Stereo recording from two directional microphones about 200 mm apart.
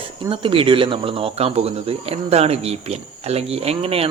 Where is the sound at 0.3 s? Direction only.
25° right (ahead or behind).